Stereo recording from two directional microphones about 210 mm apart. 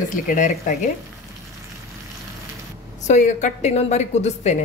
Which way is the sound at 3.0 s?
35° left (ahead or behind).